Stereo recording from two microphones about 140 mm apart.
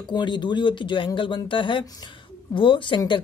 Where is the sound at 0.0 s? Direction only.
35° left (ahead or behind).